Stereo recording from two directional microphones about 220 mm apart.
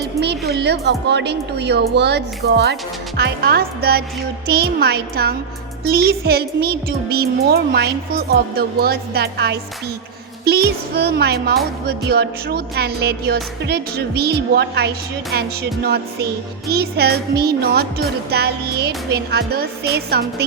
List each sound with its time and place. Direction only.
0.0 s music: 50° right (ahead or behind)
0.5 s speech: 50° right (ahead or behind)